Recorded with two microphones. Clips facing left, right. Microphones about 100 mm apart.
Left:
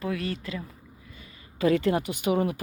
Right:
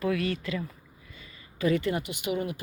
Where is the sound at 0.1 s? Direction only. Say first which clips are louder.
Right 2 dB; 30° left (ahead or behind).